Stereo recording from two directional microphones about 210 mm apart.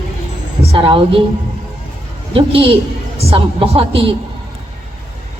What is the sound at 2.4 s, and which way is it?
A woman's voice, 25° right (ahead or behind).